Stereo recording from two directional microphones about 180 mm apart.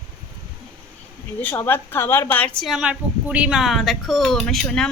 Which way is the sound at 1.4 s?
10° left (ahead or behind).